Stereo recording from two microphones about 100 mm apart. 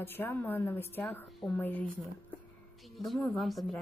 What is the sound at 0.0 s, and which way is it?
A woman's voice, 20° left (ahead or behind).